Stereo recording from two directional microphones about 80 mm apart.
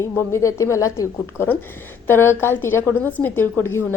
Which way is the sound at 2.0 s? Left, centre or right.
Left.